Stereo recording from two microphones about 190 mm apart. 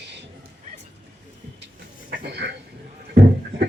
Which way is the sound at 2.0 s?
65° right (ahead or behind).